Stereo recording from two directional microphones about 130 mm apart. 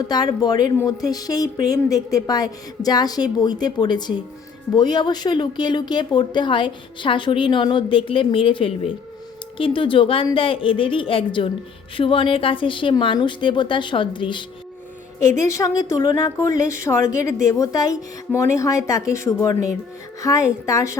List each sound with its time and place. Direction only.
0.1 s a woman's voice: 30° left (ahead or behind)
15.4 s a woman's voice: 25° left (ahead or behind)